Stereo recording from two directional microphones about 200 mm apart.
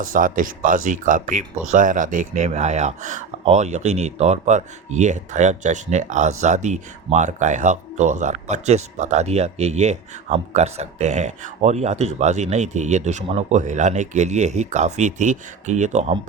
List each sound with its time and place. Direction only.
0.0 s speech: 45° right (ahead or behind)